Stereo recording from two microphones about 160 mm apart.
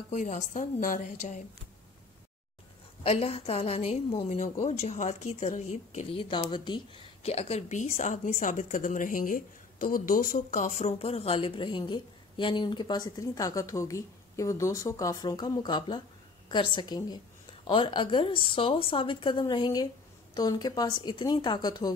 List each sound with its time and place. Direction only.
0.1 s a woman's voice: 50° left (ahead or behind)
3.0 s a woman's voice: 40° left (ahead or behind)
6.3 s a woman's voice: 30° left (ahead or behind)